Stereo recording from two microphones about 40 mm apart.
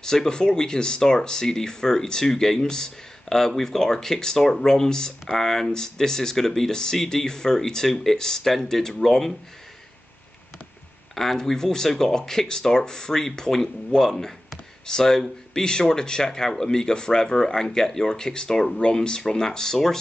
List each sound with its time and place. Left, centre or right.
0.0 s speech: centre
11.4 s speech: centre